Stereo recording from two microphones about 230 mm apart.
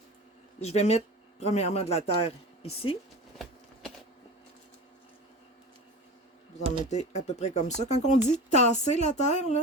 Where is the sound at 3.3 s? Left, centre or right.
Centre.